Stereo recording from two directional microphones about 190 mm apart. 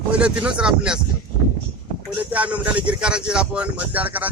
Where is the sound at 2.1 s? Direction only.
5° right (ahead or behind).